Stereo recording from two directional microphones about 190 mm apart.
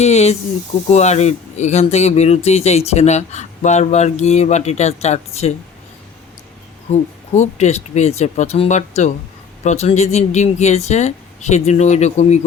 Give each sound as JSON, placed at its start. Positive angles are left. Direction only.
{"t": 0.0, "sound": "speech", "side_deg": 35}
{"t": 7.3, "sound": "speech", "side_deg": 35}